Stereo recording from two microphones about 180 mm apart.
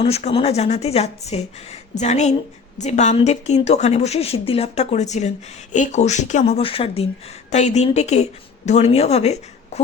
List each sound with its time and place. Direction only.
0.0 s a woman's voice: 35° left (ahead or behind)